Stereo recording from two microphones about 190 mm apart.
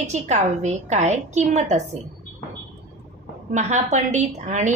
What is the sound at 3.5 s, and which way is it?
A woman's voice, 40° right (ahead or behind).